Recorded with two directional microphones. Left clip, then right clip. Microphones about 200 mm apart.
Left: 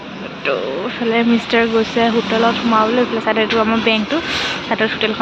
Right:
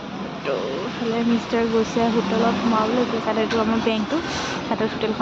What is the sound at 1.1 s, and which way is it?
Speech, 10° left (ahead or behind).